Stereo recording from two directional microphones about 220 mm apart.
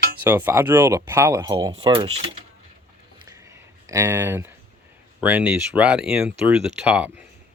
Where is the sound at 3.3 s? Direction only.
15° right (ahead or behind).